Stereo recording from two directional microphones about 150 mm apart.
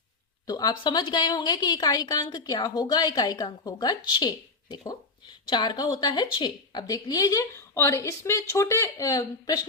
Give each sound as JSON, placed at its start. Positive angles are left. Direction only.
{"t": 0.4, "sound": "a woman's voice", "side_deg": 25}